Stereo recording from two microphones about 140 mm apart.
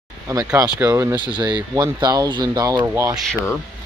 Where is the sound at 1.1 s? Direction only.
35° right (ahead or behind).